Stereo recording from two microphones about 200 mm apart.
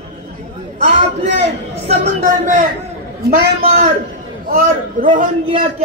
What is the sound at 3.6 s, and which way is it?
Speech, 35° right (ahead or behind).